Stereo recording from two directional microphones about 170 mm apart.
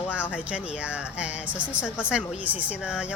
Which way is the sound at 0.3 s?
5° right (ahead or behind).